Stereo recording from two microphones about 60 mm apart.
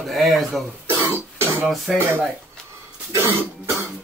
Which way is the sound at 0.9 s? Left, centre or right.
Right.